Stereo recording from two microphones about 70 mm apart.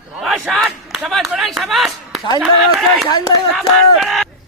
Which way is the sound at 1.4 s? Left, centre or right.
Centre.